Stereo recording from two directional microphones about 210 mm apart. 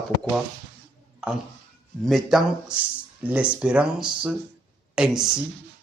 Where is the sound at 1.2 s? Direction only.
5° right (ahead or behind).